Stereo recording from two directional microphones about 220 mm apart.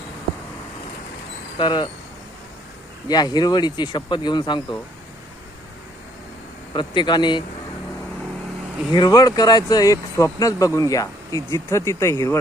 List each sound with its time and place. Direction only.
1.5 s speech: 20° left (ahead or behind)
3.1 s speech: 20° left (ahead or behind)
6.7 s speech: 20° left (ahead or behind)
8.9 s speech: 20° left (ahead or behind)